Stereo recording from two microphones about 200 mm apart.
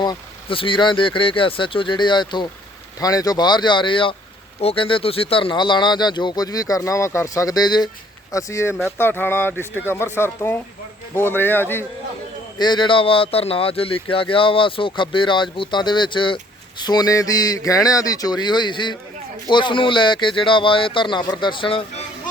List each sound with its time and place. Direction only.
0.0 s speech: 25° left (ahead or behind)
12.5 s speech: 20° left (ahead or behind)